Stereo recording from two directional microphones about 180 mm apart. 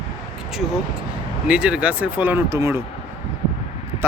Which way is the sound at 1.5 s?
5° right (ahead or behind).